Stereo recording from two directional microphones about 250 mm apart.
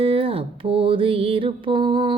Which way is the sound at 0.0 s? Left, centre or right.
Right.